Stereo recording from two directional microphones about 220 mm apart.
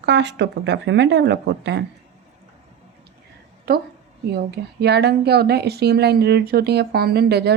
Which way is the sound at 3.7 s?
45° right (ahead or behind).